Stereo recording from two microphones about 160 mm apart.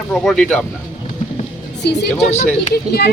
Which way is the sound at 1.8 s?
90° left.